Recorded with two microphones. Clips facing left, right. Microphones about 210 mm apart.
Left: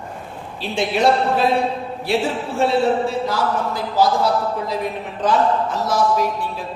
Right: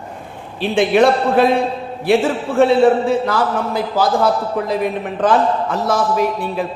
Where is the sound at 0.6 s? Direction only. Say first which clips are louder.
Right 7 dB; 55° right (ahead or behind).